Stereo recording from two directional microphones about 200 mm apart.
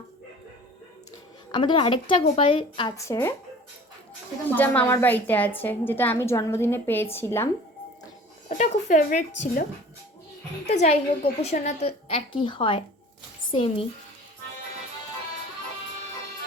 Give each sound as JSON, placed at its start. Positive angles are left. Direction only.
{"t": 1.5, "sound": "a woman's voice", "side_deg": 25}
{"t": 3.1, "sound": "a woman's voice", "side_deg": 10}
{"t": 4.4, "sound": "a woman's voice", "side_deg": 10}
{"t": 8.4, "sound": "speech", "side_deg": 35}
{"t": 10.7, "sound": "a woman's voice", "side_deg": 30}